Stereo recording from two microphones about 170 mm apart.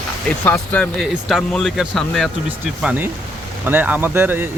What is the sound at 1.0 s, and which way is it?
Speech, centre (ahead or behind).